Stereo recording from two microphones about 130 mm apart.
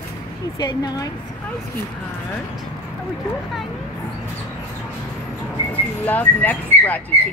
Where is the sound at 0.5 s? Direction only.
30° left (ahead or behind).